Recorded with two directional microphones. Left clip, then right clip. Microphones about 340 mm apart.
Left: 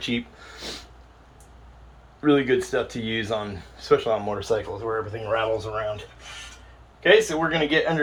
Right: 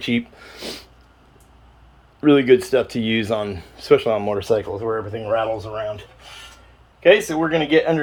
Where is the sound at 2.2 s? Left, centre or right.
Right.